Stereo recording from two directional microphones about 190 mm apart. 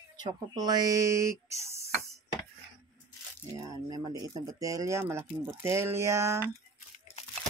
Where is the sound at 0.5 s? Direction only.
20° right (ahead or behind).